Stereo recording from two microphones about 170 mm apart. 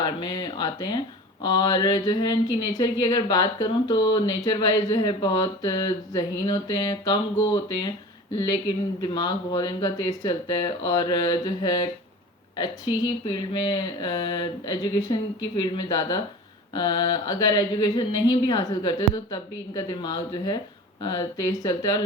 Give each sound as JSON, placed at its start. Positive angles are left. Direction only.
{"t": 0.0, "sound": "speech", "side_deg": 25}
{"t": 9.0, "sound": "speech", "side_deg": 25}